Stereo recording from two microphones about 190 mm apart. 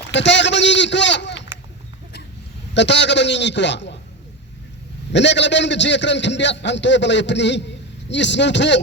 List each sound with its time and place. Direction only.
0.1 s a man's voice: 70° left (ahead or behind)
2.7 s a man's voice: 70° left (ahead or behind)
5.1 s a man's voice: 70° left (ahead or behind)